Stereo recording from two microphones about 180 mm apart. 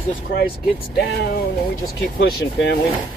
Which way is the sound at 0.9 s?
60° left (ahead or behind).